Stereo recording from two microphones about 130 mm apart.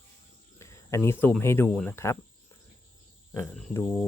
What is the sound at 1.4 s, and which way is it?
Speech, 20° left (ahead or behind).